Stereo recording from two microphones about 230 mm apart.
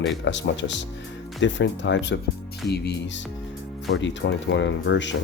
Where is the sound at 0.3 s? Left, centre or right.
Left.